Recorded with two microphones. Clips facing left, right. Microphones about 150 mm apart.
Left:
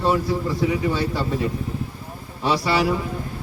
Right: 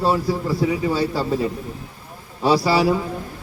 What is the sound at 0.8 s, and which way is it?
Speech, 35° right (ahead or behind).